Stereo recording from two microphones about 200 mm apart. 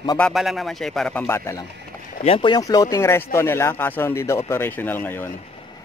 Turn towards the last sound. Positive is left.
turn(degrees=10)  # may be behind; listen again after turning